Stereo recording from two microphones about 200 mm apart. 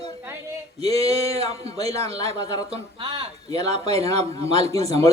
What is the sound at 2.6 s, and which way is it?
Speech, 25° right (ahead or behind).